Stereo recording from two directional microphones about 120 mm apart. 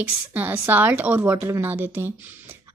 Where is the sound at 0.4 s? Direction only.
15° right (ahead or behind).